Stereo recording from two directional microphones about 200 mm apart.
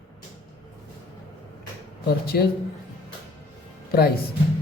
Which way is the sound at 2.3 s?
50° left (ahead or behind).